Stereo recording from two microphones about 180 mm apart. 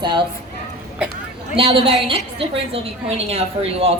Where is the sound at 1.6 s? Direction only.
30° right (ahead or behind).